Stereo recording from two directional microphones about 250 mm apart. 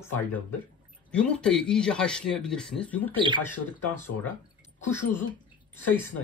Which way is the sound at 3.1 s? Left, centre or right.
Centre.